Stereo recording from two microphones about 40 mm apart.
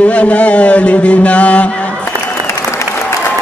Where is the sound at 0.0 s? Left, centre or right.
Left.